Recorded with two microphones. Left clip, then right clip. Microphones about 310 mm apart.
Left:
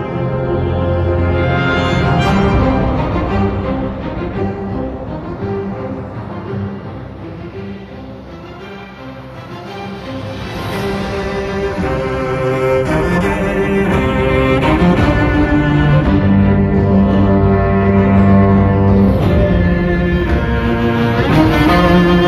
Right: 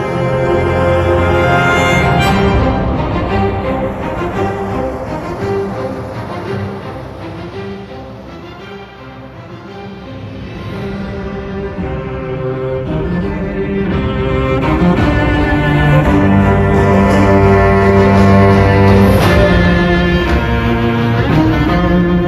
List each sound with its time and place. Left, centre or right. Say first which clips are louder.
0.0 s music: right 5 dB; right
0.8 s music: right 6 dB; right
11.8 s music: left 5 dB; left
13.0 s music: left 4 dB; left; by 17.0 s right
17.0 s music: right 5 dB; right; by 22.2 s centre